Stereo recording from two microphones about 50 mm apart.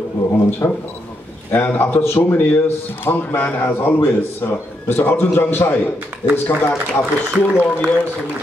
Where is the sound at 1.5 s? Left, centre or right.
Left.